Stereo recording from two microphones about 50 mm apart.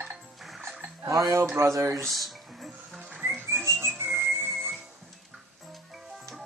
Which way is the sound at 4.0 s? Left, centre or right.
Right.